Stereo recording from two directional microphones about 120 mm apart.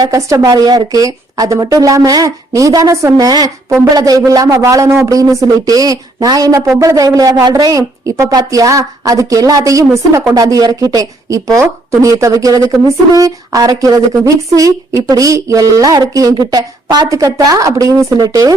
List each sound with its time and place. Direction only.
0.0 s speech: 30° right (ahead or behind)